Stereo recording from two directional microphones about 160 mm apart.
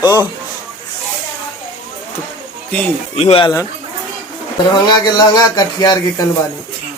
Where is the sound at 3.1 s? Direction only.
35° left (ahead or behind).